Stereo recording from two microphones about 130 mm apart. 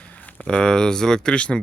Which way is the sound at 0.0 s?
10° left (ahead or behind).